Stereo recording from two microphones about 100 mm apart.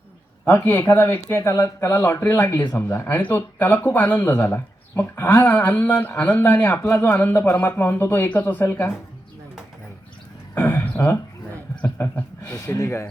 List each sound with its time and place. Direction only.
0.4 s speech: 20° left (ahead or behind)
10.5 s a sound: 20° left (ahead or behind)
11.9 s speech: 20° left (ahead or behind)